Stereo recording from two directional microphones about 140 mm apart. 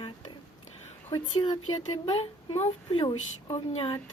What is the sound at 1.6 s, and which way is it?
Speech, 45° left (ahead or behind).